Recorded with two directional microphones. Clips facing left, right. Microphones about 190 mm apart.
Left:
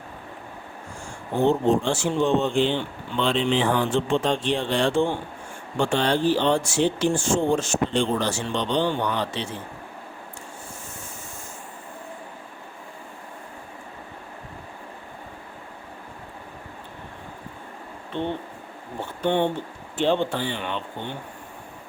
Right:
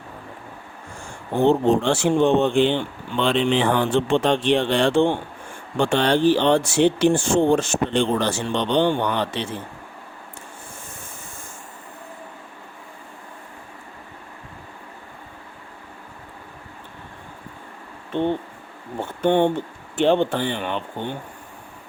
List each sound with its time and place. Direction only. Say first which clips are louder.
1.5 s speech: right 3 dB; 70° right (ahead or behind)
19.2 s a man's voice: right 4 dB; 50° right (ahead or behind)